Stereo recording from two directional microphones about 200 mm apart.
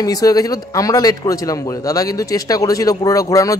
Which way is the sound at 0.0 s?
15° left (ahead or behind).